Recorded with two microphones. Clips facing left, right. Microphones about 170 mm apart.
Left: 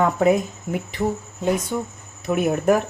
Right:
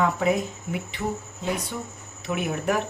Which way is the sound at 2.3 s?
45° left (ahead or behind).